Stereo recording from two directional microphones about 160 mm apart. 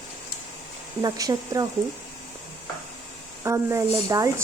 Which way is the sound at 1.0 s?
25° right (ahead or behind).